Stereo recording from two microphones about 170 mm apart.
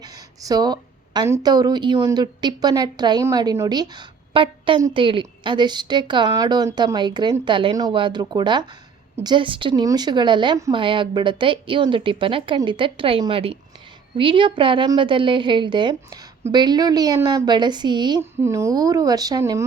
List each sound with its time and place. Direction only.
0.4 s speech: 25° right (ahead or behind)